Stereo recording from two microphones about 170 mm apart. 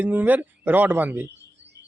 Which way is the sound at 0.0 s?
10° right (ahead or behind).